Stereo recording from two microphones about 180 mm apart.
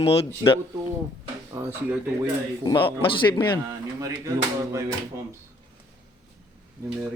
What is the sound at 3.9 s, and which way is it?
Speech, 20° right (ahead or behind).